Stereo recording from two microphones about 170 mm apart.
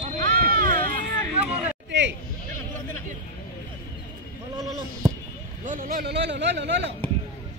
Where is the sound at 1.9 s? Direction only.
90° right.